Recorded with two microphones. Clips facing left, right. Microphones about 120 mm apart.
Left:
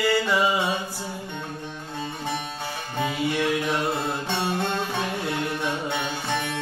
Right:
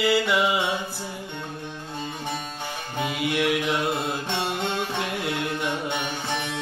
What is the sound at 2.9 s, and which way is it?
Music, 10° right (ahead or behind).